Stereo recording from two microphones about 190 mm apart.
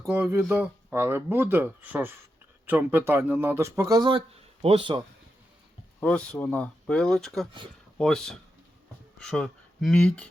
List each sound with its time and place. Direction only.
0.1 s speech: 15° right (ahead or behind)
6.0 s speech: 5° left (ahead or behind)